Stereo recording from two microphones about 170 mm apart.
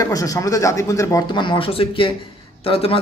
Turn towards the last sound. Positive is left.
turn(degrees=35)  # may be behind; listen again after turning